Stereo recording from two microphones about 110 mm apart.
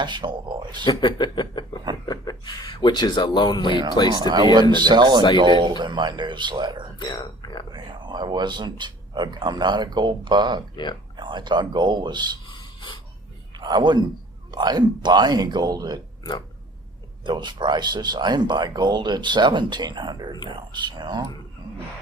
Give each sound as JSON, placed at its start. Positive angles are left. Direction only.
{"t": 0.0, "sound": "speech", "side_deg": -45}
{"t": 0.9, "sound": "speech", "side_deg": 45}
{"t": 4.1, "sound": "speech", "side_deg": -40}
{"t": 7.0, "sound": "speech", "side_deg": 40}
{"t": 7.7, "sound": "speech", "side_deg": -40}
{"t": 12.5, "sound": "a sound", "side_deg": 45}
{"t": 13.6, "sound": "speech", "side_deg": -40}
{"t": 17.2, "sound": "speech", "side_deg": -45}